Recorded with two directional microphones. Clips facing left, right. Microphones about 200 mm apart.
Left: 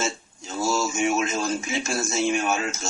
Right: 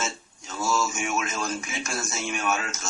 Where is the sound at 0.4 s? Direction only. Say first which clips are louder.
Left 2 dB; 30° left (ahead or behind).